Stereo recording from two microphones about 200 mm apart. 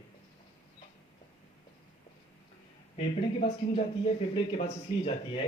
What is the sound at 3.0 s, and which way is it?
Speech, 30° left (ahead or behind).